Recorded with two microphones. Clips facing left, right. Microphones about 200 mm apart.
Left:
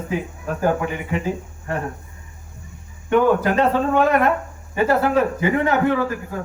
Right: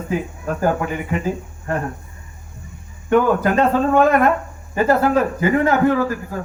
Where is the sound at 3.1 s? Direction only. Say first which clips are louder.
Right 1 dB; 45° right (ahead or behind).